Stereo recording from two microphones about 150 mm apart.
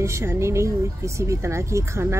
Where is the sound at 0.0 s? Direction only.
20° right (ahead or behind).